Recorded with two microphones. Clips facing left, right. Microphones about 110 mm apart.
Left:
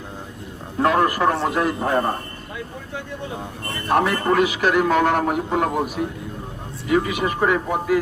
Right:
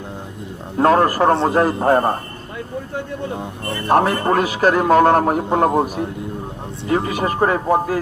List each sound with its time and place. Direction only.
0.8 s a man's voice: 40° right (ahead or behind)
3.8 s a man's voice: 40° right (ahead or behind)